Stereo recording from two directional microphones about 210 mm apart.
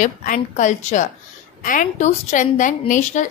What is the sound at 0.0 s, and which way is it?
A woman's voice, 40° left (ahead or behind).